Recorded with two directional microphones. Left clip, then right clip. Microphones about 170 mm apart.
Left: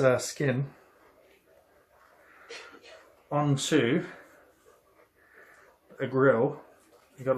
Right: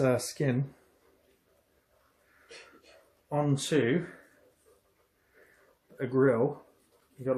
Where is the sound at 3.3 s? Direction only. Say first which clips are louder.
Left 2 dB; 25° right (ahead or behind).